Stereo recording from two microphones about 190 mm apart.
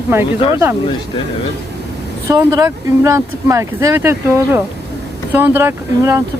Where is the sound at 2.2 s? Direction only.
20° right (ahead or behind).